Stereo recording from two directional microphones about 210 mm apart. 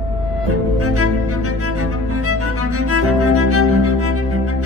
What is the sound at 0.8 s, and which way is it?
Music, 90° right.